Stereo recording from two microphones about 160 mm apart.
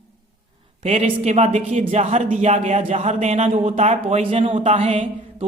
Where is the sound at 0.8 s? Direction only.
40° right (ahead or behind).